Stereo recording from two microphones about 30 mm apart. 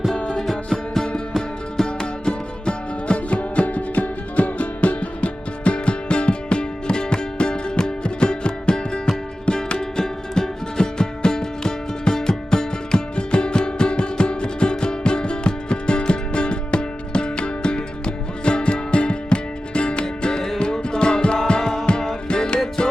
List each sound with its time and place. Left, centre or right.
1.8 s music: left
2.6 s music: left